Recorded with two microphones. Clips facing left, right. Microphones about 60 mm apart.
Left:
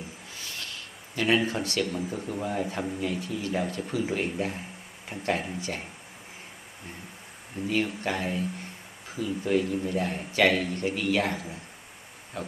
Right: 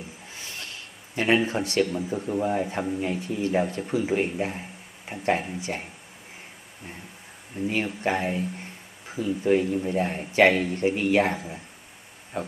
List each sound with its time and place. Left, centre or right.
0.3 s rub: right
1.1 s speech: right
7.6 s speech: right